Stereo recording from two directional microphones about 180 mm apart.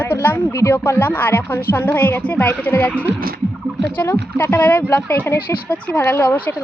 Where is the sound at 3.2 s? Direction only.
55° right (ahead or behind).